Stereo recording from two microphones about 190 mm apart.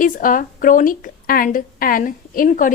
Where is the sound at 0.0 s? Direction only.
45° left (ahead or behind).